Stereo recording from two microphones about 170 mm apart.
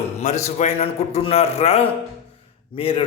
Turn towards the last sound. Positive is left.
turn(degrees=35)  # may be behind; listen again after turning